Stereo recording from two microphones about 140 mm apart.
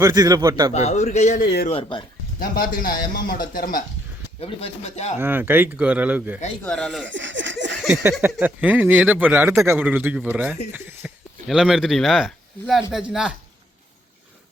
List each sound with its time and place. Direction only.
0.0 s a man's voice: 25° right (ahead or behind)
0.7 s a man's voice: 50° left (ahead or behind)
1.7 s speech: 35° left (ahead or behind)
2.4 s a man's voice: 90° left
4.4 s a man's voice: 45° left (ahead or behind)
5.1 s speech: 15° right (ahead or behind)
6.6 s speech: 5° left (ahead or behind)
8.4 s speech: 15° right (ahead or behind)
11.4 s speech: centre (ahead or behind)